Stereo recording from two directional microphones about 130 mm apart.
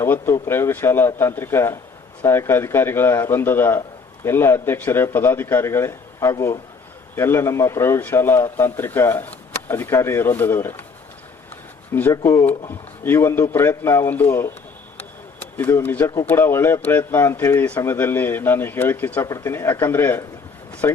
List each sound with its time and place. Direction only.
0.0 s a man's voice: 20° left (ahead or behind)
12.1 s a man's voice: 20° left (ahead or behind)